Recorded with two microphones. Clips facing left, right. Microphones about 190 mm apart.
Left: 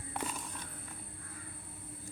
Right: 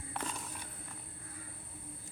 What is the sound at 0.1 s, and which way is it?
Walk, 5° left (ahead or behind).